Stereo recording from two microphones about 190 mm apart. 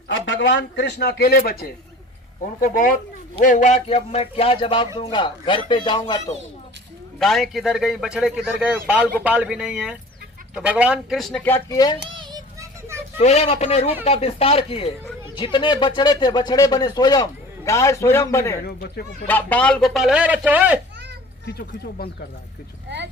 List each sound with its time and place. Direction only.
0.1 s a man's voice: 70° left (ahead or behind); by 1.5 s 55° left (ahead or behind)
2.6 s speech: 45° left (ahead or behind); by 6.3 s 25° left (ahead or behind)
7.2 s a man's voice: centre (ahead or behind)
11.5 s speech: 20° left (ahead or behind)
12.0 s child singing: 25° right (ahead or behind)
13.1 s a man's voice: 35° left (ahead or behind); by 20.7 s 10° right (ahead or behind)